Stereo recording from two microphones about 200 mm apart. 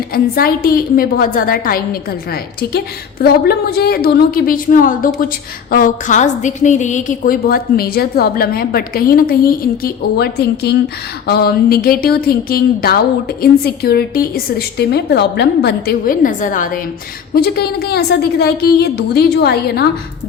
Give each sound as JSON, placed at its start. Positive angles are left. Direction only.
{"t": 0.1, "sound": "a woman's voice", "side_deg": 50}